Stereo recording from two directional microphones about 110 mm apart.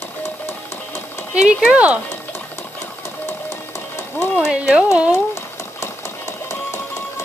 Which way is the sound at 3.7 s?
25° left (ahead or behind).